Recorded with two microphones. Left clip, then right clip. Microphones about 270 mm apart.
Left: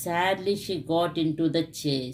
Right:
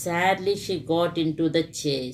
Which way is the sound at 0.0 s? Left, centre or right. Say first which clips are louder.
Right 3 dB; left.